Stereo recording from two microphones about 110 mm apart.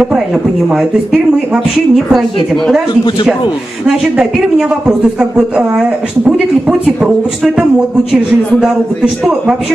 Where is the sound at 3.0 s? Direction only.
45° left (ahead or behind).